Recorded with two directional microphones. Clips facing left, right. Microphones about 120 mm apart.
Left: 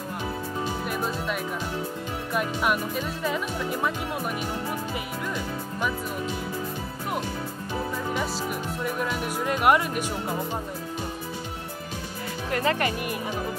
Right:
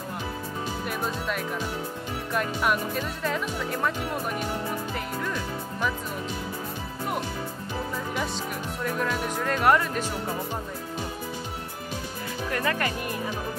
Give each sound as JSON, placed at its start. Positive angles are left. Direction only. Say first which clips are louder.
{"t": 0.8, "sound": "speech", "louder": "left 1 dB", "side_deg": 5}
{"t": 8.8, "sound": "speech", "louder": "right 2 dB", "side_deg": 10}
{"t": 12.4, "sound": "speech", "louder": "left 3 dB", "side_deg": 25}